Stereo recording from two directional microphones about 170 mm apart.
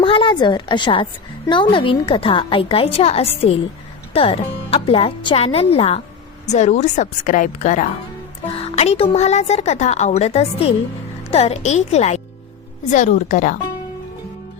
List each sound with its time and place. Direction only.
0.0 s a woman's voice: 30° left (ahead or behind); by 13.6 s 45° left (ahead or behind)